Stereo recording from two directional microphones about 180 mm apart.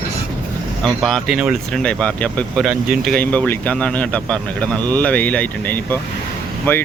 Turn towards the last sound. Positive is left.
turn(degrees=10)  # may be behind; listen again after turning